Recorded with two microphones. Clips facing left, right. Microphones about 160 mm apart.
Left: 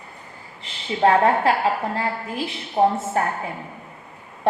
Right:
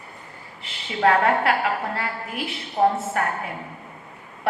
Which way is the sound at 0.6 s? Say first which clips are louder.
Left 2 dB; 30° left (ahead or behind).